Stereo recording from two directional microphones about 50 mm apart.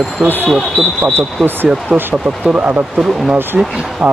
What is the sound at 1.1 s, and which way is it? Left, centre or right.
Speech, right.